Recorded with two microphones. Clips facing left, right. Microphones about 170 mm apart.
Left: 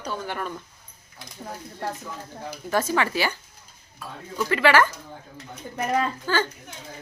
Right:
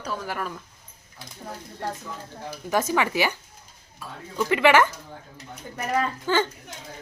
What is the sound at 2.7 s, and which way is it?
Speech, 15° right (ahead or behind).